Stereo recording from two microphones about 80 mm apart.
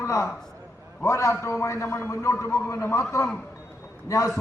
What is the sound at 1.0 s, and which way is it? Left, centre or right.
A man's voice, left.